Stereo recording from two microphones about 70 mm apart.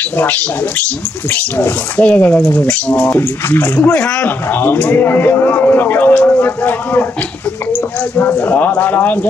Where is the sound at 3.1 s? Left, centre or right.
Left.